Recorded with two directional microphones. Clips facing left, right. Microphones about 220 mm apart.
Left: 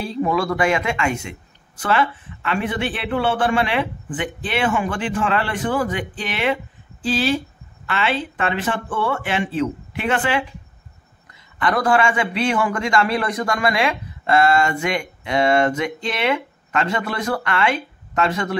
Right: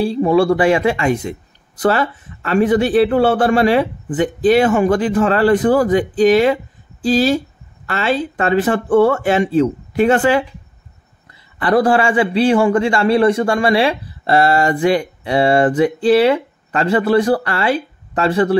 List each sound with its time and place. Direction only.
0.0 s speech: 30° right (ahead or behind)
11.6 s speech: 30° right (ahead or behind)